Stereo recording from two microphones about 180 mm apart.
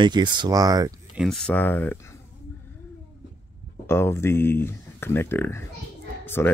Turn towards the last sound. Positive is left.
turn(degrees=10)  # may be behind; listen again after turning